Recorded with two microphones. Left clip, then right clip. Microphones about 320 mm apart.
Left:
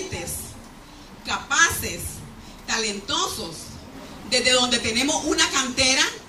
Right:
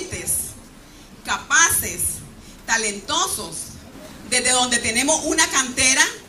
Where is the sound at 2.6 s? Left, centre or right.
Centre.